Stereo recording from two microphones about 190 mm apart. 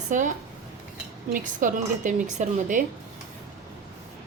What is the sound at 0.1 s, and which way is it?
A woman's voice, 40° right (ahead or behind).